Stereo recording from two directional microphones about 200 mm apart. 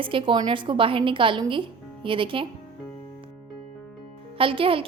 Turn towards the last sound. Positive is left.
turn(degrees=-25)  # may be behind; listen again after turning